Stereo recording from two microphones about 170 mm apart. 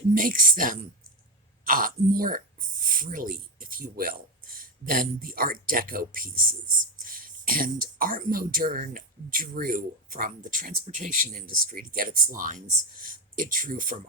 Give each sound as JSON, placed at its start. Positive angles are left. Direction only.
{"t": 0.1, "sound": "speech", "side_deg": -55}